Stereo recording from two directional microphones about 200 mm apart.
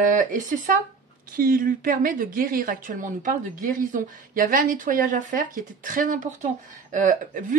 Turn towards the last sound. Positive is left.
turn(degrees=-40)  # may be behind; listen again after turning